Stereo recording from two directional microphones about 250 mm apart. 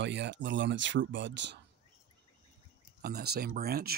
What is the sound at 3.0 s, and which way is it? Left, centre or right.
Speech, right.